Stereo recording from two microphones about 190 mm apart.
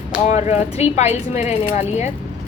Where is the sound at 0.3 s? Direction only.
35° left (ahead or behind).